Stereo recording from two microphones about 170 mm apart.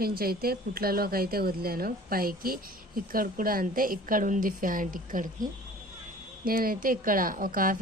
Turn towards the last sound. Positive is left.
turn(degrees=-55)  # may be behind; listen again after turning